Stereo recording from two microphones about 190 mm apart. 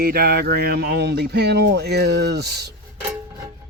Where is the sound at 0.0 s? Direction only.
55° right (ahead or behind).